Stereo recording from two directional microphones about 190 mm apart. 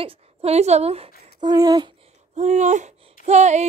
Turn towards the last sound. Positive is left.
turn(degrees=-35)  # may be behind; listen again after turning